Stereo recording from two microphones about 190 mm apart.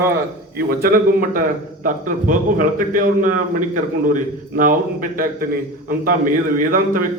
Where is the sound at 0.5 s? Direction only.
50° right (ahead or behind).